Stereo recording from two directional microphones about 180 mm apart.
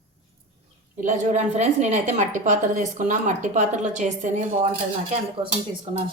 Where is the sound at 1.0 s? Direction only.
40° right (ahead or behind).